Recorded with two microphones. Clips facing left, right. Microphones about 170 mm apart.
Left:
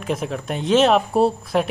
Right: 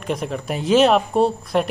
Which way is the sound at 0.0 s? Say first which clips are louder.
Even; centre (ahead or behind).